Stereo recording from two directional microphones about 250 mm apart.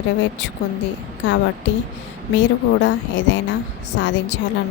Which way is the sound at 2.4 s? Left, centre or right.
Left.